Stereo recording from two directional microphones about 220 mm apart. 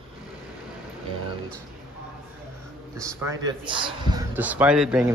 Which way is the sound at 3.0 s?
15° right (ahead or behind).